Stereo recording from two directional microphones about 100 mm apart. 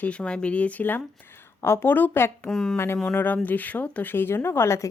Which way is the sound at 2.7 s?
25° left (ahead or behind).